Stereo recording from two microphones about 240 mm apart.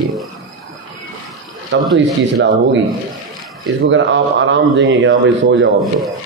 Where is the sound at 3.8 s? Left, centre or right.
Right.